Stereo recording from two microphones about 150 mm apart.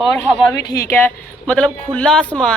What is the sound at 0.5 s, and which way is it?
Speech, 20° left (ahead or behind).